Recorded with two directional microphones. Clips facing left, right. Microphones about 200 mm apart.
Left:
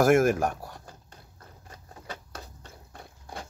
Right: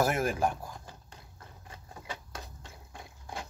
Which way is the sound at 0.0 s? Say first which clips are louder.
Left 8 dB; 90° left.